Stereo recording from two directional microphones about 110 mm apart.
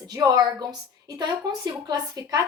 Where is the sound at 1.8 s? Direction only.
35° right (ahead or behind).